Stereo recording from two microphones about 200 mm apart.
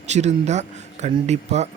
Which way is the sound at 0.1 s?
35° right (ahead or behind).